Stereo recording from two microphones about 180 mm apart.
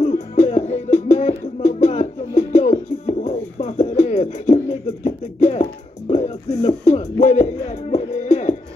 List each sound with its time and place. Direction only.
0.1 s music: 40° left (ahead or behind)